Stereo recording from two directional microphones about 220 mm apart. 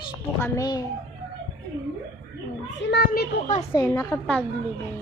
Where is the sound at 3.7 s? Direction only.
15° left (ahead or behind).